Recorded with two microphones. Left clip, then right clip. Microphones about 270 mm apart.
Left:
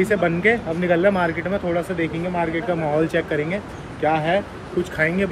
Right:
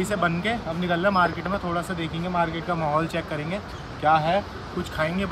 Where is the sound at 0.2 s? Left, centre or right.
Centre.